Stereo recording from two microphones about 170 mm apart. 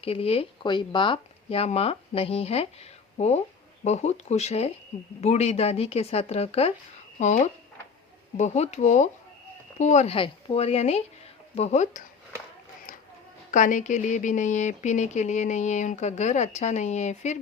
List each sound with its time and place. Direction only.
0.0 s speech: 35° left (ahead or behind)
13.5 s speech: 50° left (ahead or behind)